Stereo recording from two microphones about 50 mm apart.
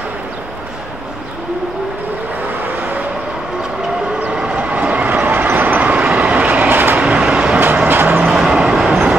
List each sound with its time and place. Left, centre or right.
4.3 s vehicle: right
7.9 s vehicle: right
8.3 s vehicle: centre